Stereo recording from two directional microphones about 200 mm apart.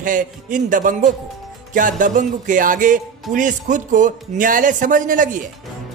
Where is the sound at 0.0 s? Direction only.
40° right (ahead or behind).